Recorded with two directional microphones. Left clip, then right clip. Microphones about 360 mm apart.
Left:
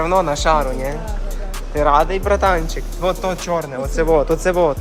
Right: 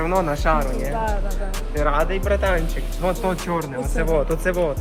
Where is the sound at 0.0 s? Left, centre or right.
Centre.